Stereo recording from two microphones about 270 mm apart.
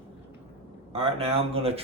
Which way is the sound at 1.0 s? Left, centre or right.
Right.